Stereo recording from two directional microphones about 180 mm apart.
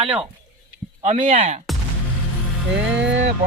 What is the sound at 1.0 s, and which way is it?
Speech, 40° right (ahead or behind).